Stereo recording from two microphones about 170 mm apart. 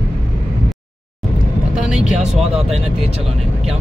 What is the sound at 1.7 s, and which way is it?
Vehicle, 5° right (ahead or behind).